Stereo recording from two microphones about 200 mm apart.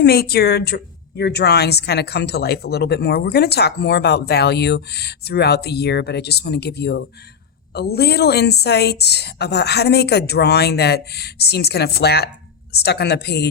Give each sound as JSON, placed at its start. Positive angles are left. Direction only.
{"t": 0.0, "sound": "a woman's voice", "side_deg": 50}